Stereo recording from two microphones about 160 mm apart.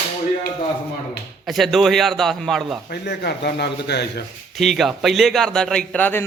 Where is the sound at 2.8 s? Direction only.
90° left.